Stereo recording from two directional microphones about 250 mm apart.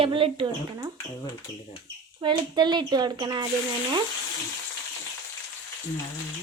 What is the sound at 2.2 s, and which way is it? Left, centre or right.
Speech, centre.